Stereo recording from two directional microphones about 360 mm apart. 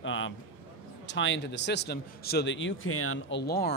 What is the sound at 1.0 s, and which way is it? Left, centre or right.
Speech, left.